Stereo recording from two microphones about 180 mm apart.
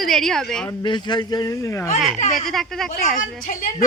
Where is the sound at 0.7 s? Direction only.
25° left (ahead or behind).